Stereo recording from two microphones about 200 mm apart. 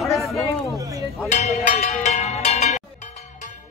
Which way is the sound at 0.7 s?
15° right (ahead or behind).